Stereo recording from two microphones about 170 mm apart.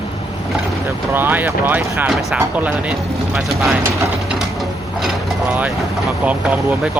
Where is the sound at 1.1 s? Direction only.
10° right (ahead or behind).